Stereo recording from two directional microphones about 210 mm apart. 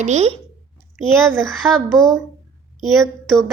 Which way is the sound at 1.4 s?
Centre (ahead or behind).